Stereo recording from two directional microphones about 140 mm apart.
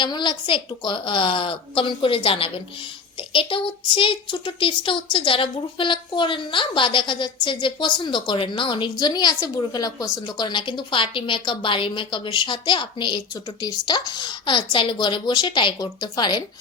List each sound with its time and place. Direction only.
0.0 s a woman's voice: 35° left (ahead or behind)